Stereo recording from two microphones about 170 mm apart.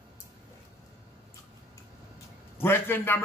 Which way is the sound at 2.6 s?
15° left (ahead or behind).